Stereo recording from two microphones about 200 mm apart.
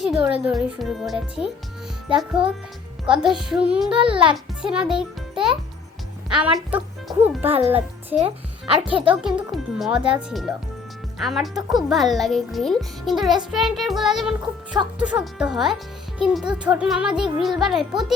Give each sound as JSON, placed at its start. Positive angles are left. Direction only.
{"t": 0.0, "sound": "a child's voice", "side_deg": -5}
{"t": 3.9, "sound": "a child's voice", "side_deg": -25}
{"t": 4.6, "sound": "a child's voice", "side_deg": -5}
{"t": 9.2, "sound": "a child's voice", "side_deg": 0}